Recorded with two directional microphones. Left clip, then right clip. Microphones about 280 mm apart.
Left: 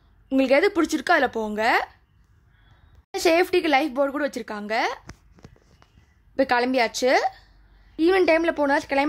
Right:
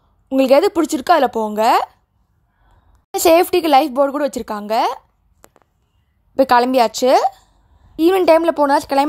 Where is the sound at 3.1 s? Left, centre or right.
Right.